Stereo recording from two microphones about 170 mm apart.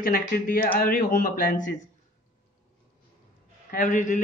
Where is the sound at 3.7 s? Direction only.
50° left (ahead or behind).